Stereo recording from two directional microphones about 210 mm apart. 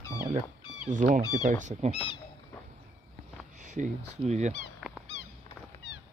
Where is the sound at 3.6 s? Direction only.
35° right (ahead or behind).